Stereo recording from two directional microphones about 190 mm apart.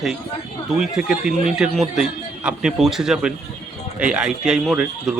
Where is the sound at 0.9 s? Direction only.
5° right (ahead or behind).